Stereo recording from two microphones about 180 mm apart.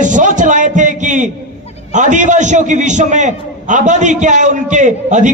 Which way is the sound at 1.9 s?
45° right (ahead or behind).